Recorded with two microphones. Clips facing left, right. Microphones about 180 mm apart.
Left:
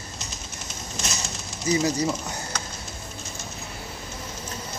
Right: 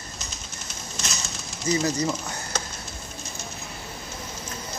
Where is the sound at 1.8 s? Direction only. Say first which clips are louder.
Left 1 dB; 10° left (ahead or behind).